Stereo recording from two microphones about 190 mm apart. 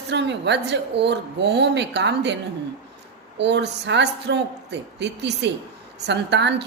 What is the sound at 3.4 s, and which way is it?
A woman's voice, 65° right (ahead or behind).